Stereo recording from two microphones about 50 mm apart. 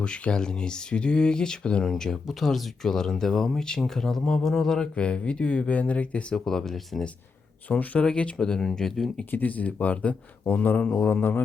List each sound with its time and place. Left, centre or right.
0.0 s speech: centre
4.9 s speech: left
6.3 s speech: centre
9.3 s speech: left
11.2 s speech: left